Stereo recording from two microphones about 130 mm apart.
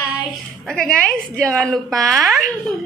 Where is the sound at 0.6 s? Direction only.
5° left (ahead or behind).